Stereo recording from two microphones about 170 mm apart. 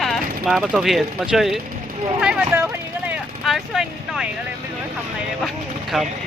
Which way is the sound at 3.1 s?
Centre (ahead or behind).